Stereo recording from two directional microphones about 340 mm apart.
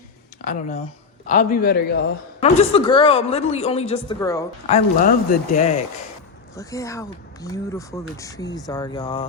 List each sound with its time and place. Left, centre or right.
1.3 s speech: left
2.4 s a woman's voice: centre
6.6 s a woman's voice: centre